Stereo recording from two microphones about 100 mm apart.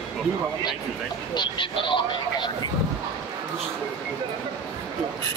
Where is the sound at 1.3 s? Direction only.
50° left (ahead or behind).